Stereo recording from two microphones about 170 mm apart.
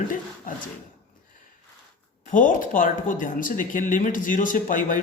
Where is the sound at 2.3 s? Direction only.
50° left (ahead or behind).